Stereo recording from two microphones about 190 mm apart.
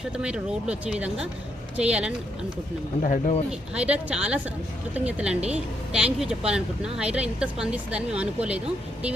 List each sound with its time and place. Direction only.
0.0 s speech: 5° right (ahead or behind)
3.0 s speech: 40° left (ahead or behind)
3.8 s a woman's voice: 5° right (ahead or behind)